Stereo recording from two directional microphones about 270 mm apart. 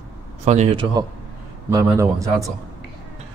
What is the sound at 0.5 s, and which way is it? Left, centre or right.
A man's voice, right.